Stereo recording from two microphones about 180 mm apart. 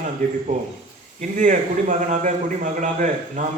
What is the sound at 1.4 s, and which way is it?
A man's voice, 45° right (ahead or behind).